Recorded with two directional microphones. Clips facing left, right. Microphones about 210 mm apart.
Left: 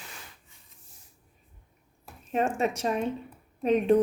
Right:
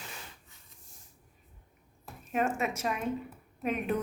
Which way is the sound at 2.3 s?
30° left (ahead or behind).